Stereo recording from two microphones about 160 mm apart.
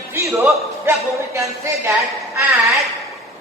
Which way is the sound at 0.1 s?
15° right (ahead or behind).